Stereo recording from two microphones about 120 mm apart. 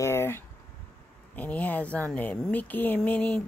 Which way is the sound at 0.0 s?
20° left (ahead or behind).